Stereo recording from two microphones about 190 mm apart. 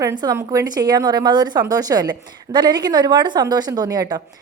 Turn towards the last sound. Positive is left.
turn(degrees=-20)  # may be behind; listen again after turning